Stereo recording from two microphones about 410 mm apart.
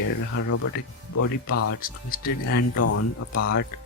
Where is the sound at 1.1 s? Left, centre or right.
Left.